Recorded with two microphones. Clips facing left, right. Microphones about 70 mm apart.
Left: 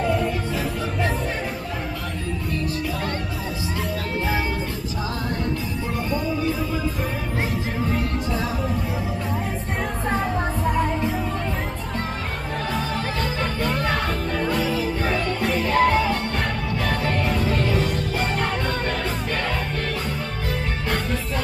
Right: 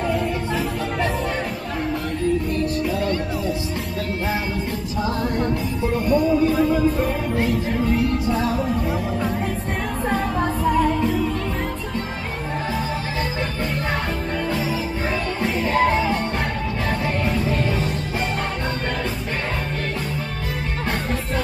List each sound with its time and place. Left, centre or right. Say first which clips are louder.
0.0 s music: even; centre
6.1 s music: right 8 dB; centre
8.3 s music: right 4 dB; centre
14.7 s music: left 1 dB; centre
15.9 s music: even; centre